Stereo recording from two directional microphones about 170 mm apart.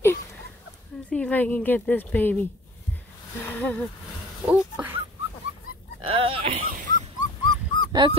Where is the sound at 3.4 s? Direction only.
10° left (ahead or behind).